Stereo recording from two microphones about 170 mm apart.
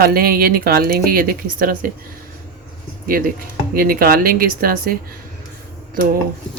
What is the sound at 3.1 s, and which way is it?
Speech, 60° right (ahead or behind).